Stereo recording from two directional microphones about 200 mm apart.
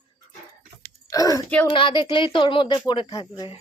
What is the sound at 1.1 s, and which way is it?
Speech, 15° left (ahead or behind).